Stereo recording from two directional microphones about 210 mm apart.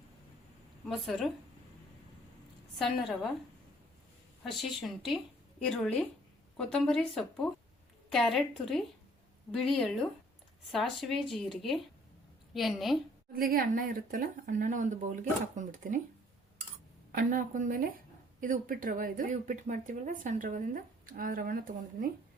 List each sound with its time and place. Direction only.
0.9 s speech: centre (ahead or behind)
2.7 s speech: centre (ahead or behind)
4.5 s speech: centre (ahead or behind)
13.3 s speech: 45° right (ahead or behind)
17.1 s speech: 40° right (ahead or behind)